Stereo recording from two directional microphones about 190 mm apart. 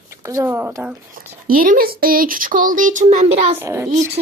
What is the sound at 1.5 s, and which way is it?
Speech, 50° right (ahead or behind).